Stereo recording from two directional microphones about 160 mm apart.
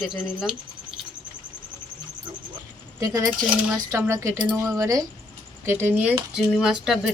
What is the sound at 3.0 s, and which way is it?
Speech, 20° right (ahead or behind).